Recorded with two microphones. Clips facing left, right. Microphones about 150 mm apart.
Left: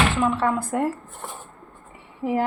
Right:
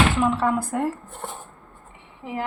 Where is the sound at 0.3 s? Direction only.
Centre (ahead or behind).